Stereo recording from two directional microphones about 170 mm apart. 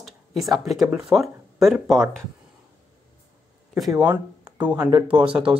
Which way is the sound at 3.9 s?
20° right (ahead or behind).